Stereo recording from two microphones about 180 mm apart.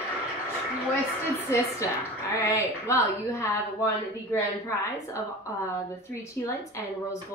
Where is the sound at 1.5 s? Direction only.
15° left (ahead or behind).